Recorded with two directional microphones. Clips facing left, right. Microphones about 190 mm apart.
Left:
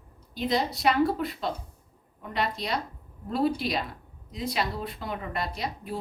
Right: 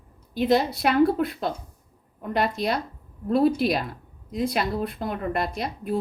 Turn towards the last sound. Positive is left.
turn(degrees=-55)  # may be behind; listen again after turning